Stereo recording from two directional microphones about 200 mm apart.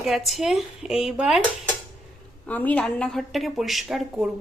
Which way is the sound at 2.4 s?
10° left (ahead or behind).